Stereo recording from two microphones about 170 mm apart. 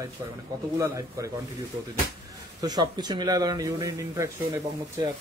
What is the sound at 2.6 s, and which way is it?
Speech, 25° right (ahead or behind).